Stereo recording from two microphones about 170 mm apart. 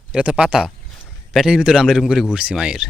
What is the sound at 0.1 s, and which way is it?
A man's voice, 5° right (ahead or behind).